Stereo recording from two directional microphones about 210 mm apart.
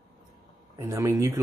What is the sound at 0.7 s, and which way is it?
Speech, 15° right (ahead or behind).